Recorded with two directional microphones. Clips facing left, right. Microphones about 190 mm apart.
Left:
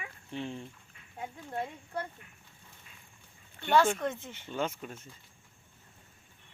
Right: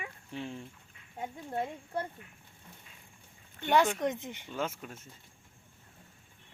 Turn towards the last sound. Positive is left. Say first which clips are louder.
# left 2 dB
turn(degrees=-5)  # may be behind; listen again after turning